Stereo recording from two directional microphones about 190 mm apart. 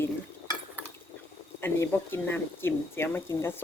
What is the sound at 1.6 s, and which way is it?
Speech, 10° left (ahead or behind).